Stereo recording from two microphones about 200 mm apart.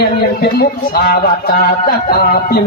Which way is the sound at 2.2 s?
50° left (ahead or behind).